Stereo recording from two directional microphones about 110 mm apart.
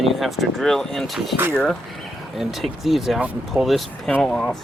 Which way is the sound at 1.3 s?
20° right (ahead or behind).